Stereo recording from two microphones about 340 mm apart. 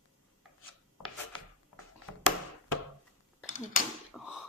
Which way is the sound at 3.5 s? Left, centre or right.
Left.